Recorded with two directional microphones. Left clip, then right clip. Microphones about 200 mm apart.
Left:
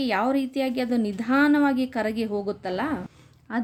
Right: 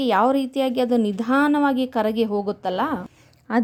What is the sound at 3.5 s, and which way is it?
Speech, 40° right (ahead or behind).